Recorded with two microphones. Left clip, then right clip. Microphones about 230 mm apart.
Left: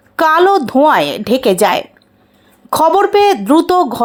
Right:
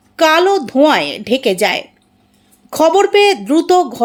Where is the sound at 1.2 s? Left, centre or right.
Left.